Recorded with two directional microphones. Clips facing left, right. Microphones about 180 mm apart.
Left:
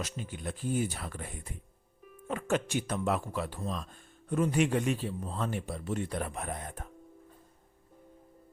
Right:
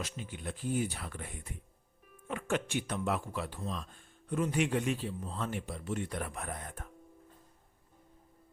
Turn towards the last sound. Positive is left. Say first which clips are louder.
# left 3 dB
turn(degrees=20)  # may be behind; listen again after turning